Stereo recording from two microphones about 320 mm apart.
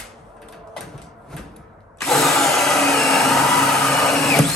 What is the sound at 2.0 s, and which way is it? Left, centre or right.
Drill, centre.